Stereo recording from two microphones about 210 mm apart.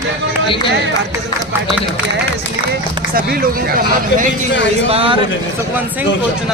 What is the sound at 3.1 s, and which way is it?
Speech, 45° right (ahead or behind).